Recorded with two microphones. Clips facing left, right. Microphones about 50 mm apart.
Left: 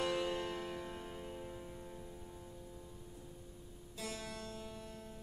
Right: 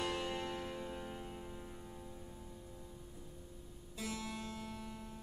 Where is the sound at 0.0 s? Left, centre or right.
Centre.